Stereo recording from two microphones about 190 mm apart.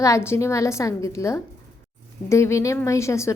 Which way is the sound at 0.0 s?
15° left (ahead or behind).